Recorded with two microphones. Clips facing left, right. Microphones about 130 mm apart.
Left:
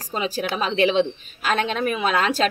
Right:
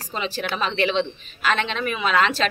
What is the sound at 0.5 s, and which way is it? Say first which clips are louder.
A woman's voice: left 3 dB; 40° left (ahead or behind).